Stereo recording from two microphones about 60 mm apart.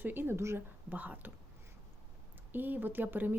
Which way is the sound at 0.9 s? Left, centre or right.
Right.